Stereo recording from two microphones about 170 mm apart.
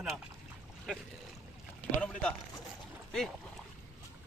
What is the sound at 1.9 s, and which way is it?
Speech, 5° left (ahead or behind).